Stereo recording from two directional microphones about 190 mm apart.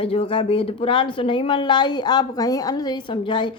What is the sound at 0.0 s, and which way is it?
A woman's voice, 30° left (ahead or behind).